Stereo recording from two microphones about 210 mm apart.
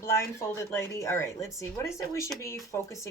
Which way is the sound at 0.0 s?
15° left (ahead or behind).